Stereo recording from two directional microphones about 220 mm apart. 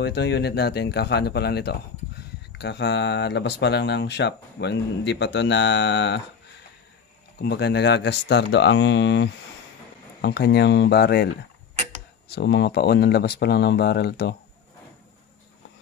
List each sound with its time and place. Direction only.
0.0 s speech: 50° left (ahead or behind)
7.3 s speech: 50° left (ahead or behind)
12.3 s speech: 50° left (ahead or behind)